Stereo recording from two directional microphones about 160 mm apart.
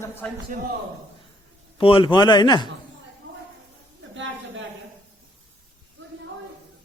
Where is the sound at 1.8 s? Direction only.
35° left (ahead or behind).